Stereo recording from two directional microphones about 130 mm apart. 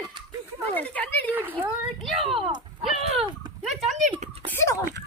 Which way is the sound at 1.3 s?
15° right (ahead or behind).